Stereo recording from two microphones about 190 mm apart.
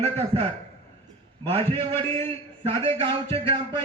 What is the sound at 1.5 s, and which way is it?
A man's voice, 30° right (ahead or behind).